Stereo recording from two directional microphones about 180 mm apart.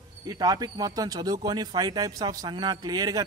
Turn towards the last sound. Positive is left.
turn(degrees=-20)  # may be behind; listen again after turning